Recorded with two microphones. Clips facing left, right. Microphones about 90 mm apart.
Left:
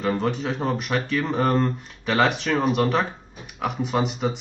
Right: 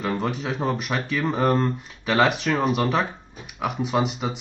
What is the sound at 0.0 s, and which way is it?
Speech, centre (ahead or behind).